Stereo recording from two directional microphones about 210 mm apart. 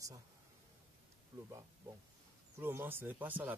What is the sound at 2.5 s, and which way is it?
Speech, 10° right (ahead or behind).